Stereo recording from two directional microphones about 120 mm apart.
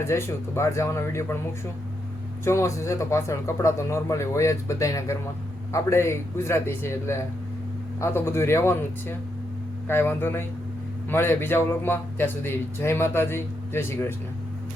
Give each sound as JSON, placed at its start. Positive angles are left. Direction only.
{"t": 0.0, "sound": "a man's voice", "side_deg": 20}
{"t": 2.4, "sound": "a man's voice", "side_deg": 25}